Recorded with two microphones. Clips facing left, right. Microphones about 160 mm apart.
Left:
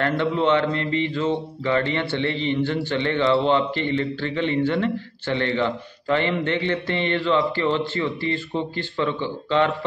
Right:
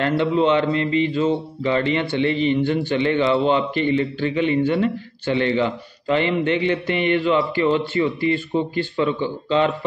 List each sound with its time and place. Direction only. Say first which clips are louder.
0.0 s speech: right 3 dB; 15° right (ahead or behind)